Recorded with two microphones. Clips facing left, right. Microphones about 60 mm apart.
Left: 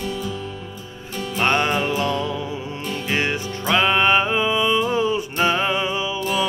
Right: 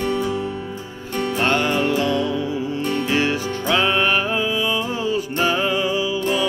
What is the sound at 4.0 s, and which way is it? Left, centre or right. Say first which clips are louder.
Music: left 2 dB; left.